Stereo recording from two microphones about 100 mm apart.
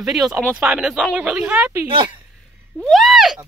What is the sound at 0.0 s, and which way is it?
Speech, 5° right (ahead or behind).